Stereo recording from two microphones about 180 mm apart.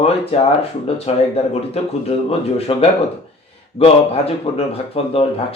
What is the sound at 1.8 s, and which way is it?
Speech, 35° left (ahead or behind).